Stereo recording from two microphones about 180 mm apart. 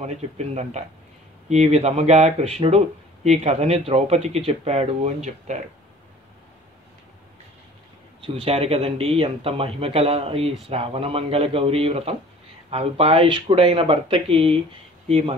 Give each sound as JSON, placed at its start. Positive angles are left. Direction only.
{"t": 0.0, "sound": "speech", "side_deg": -35}
{"t": 8.2, "sound": "speech", "side_deg": -30}